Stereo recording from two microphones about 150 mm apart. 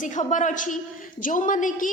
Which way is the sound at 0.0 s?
55° left (ahead or behind).